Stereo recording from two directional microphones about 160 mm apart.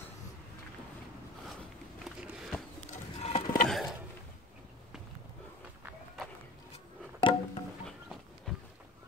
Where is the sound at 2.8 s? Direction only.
45° left (ahead or behind).